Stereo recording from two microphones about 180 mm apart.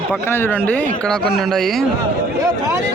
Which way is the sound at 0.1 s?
10° left (ahead or behind).